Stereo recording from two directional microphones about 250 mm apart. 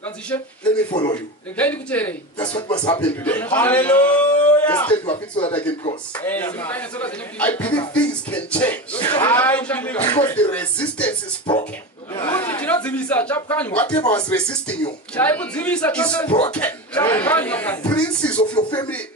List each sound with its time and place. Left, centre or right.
0.3 s a man's voice: centre
2.3 s speech: centre
3.0 s a man's voice: centre
5.0 s speech: left
5.5 s a man's voice: centre
12.1 s chuckle: centre
13.9 s a man's voice: centre
14.3 s a man's voice: centre
16.3 s speech: centre
16.5 s a man's voice: centre
18.6 s speech: centre